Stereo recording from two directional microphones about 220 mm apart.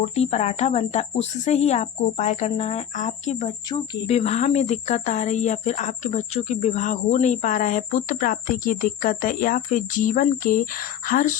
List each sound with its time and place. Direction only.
0.1 s speech: 30° left (ahead or behind)